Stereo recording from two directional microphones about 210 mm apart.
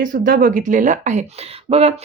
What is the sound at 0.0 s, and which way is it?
Speech, 40° right (ahead or behind).